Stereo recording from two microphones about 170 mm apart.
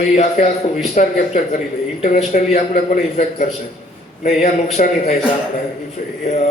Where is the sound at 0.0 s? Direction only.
45° left (ahead or behind).